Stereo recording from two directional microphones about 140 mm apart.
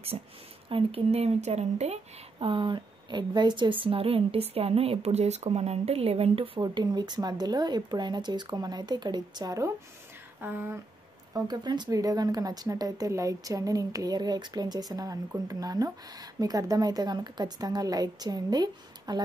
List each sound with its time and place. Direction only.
0.1 s speech: 40° right (ahead or behind)
2.4 s a woman's voice: 35° right (ahead or behind)
10.4 s speech: 15° right (ahead or behind)
11.3 s speech: 30° right (ahead or behind)